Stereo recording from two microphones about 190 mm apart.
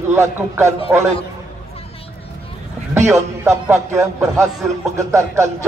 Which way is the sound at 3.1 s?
15° right (ahead or behind).